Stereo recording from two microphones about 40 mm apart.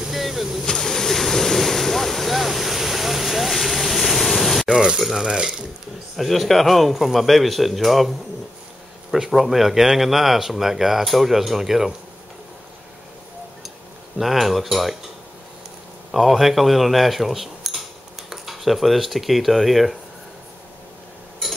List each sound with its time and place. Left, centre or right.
0.0 s vehicle: centre
0.7 s vehicle: centre
4.6 s frying: centre
5.2 s speech: centre
6.1 s speech: centre
9.1 s speech: centre
14.1 s speech: centre
16.1 s cutlery: centre
18.3 s speech: centre